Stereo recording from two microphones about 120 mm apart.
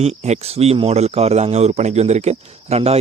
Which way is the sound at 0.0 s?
65° right (ahead or behind).